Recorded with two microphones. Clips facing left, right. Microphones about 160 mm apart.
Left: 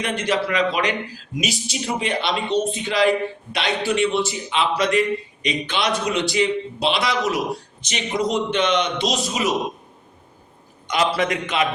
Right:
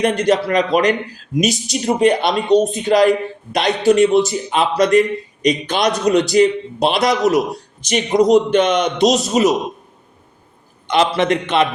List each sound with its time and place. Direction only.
0.0 s a man's voice: 45° right (ahead or behind)
10.8 s a man's voice: 25° right (ahead or behind)